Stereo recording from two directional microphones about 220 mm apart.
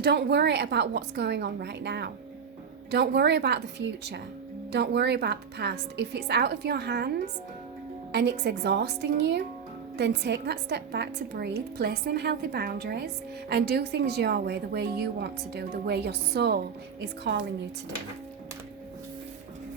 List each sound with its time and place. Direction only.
0.0 s a woman's voice: 50° right (ahead or behind)